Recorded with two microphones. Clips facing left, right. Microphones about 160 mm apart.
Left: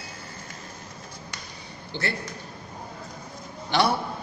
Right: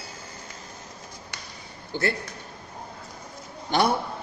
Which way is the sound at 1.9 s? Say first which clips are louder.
Right 4 dB; 45° right (ahead or behind).